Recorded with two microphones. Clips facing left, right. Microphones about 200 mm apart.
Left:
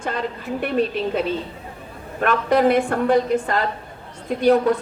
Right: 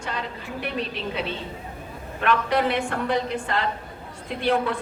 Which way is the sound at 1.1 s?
45° left (ahead or behind).